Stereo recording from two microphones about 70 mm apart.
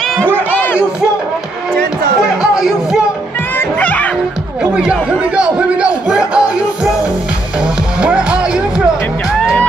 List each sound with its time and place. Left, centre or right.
0.5 s a sound: left
2.5 s music: centre
3.5 s music: left
5.3 s music: centre